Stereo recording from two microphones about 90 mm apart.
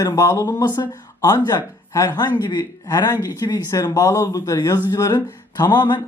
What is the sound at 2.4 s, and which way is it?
Speech, 55° left (ahead or behind).